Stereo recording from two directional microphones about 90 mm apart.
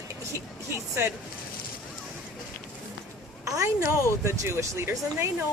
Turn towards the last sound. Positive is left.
turn(degrees=-30)  # may be behind; listen again after turning